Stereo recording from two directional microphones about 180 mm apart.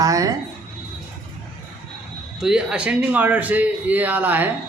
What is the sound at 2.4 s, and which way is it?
A man's voice, 5° right (ahead or behind).